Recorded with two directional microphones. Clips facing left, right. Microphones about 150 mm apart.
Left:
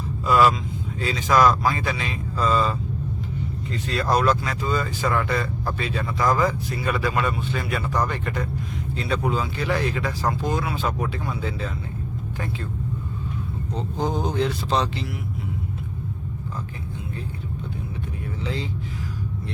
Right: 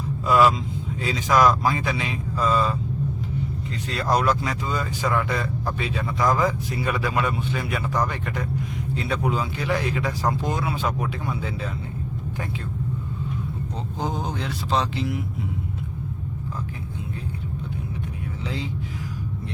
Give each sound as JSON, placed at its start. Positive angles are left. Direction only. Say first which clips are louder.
{"t": 0.3, "sound": "speech", "louder": "even", "side_deg": -15}
{"t": 3.9, "sound": "speech", "louder": "left 1 dB", "side_deg": -15}
{"t": 6.1, "sound": "speech", "louder": "even", "side_deg": 0}
{"t": 6.4, "sound": "speech", "louder": "even", "side_deg": -15}
{"t": 14.0, "sound": "speech", "louder": "left 5 dB", "side_deg": -10}